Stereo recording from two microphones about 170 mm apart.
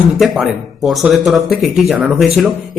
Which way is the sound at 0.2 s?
Centre (ahead or behind).